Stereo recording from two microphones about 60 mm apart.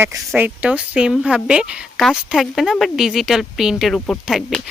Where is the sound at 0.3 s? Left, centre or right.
Right.